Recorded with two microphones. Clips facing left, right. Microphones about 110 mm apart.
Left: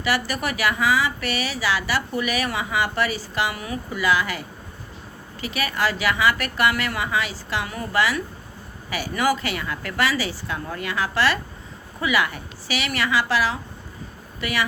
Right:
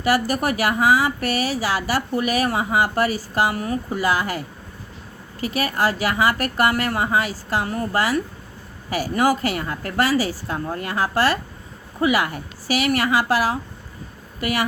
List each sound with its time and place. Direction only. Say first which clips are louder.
0.0 s speech: right 5 dB; 45° right (ahead or behind)